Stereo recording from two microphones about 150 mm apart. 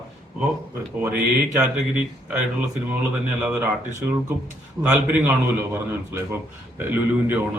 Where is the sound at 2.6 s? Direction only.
10° right (ahead or behind).